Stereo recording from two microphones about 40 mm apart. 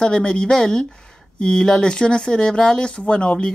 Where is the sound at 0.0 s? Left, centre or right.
Left.